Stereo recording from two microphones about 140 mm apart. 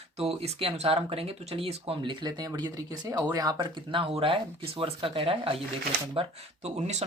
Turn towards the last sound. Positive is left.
turn(degrees=-50)  # may be behind; listen again after turning